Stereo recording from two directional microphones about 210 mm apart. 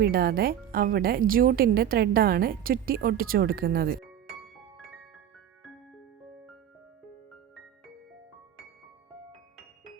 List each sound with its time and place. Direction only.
0.0 s speech: 45° right (ahead or behind)